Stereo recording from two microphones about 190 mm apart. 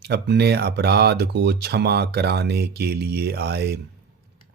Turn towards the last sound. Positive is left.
turn(degrees=-60)  # may be behind; listen again after turning